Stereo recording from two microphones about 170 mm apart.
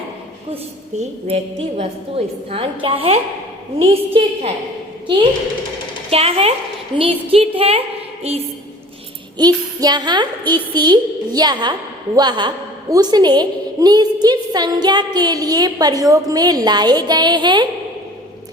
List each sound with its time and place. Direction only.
0.5 s a woman's voice: 35° right (ahead or behind)
6.1 s a woman's voice: 35° right (ahead or behind)
9.4 s a woman's voice: 25° right (ahead or behind)